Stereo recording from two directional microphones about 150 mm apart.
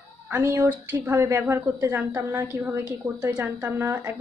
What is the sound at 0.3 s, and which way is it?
A woman's voice, 20° right (ahead or behind).